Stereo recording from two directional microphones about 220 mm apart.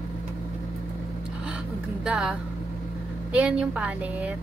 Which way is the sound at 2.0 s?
5° right (ahead or behind).